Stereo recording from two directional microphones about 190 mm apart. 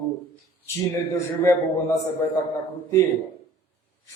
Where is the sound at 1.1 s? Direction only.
15° left (ahead or behind).